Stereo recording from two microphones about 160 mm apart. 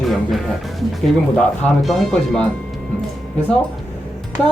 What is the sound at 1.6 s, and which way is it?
Speech, 5° left (ahead or behind).